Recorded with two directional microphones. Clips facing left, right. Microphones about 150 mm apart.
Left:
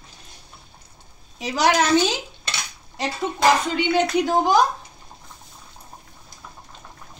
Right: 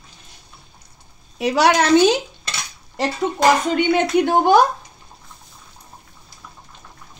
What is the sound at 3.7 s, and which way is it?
Speech, 55° right (ahead or behind).